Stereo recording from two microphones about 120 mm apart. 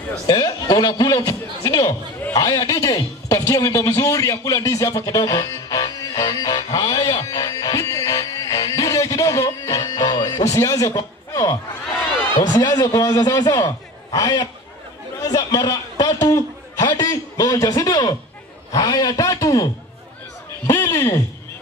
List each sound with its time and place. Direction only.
0.3 s a man's voice: 35° left (ahead or behind)
2.3 s a sound: 35° left (ahead or behind)
12.4 s a man's voice: 35° left (ahead or behind)